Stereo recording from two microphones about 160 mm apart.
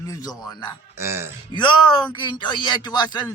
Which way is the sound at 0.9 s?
15° right (ahead or behind).